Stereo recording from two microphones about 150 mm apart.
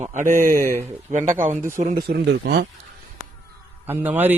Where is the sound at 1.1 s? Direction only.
55° right (ahead or behind); by 2.7 s 90° right.